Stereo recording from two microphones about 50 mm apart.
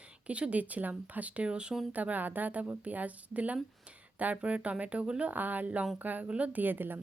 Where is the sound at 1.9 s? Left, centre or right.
Right.